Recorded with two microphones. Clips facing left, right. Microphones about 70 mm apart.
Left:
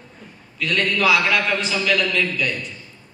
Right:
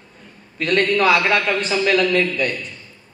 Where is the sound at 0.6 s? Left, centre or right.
Right.